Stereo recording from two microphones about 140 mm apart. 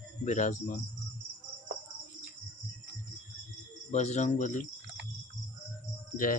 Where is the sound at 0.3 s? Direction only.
60° left (ahead or behind).